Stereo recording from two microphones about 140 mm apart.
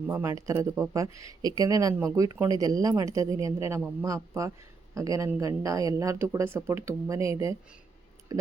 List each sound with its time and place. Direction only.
0.1 s speech: 20° right (ahead or behind)